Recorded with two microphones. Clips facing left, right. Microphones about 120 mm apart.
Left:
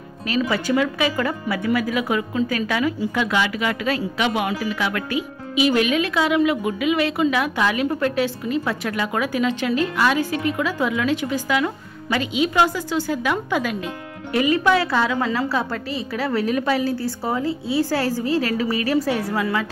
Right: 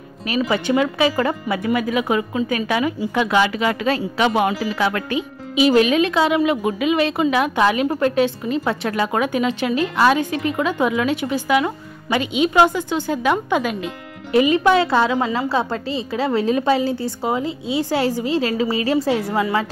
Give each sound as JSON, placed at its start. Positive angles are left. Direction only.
{"t": 0.3, "sound": "a woman's voice", "side_deg": -25}